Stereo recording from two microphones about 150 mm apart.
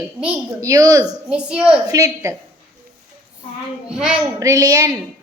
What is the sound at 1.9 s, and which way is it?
Speech, 20° right (ahead or behind).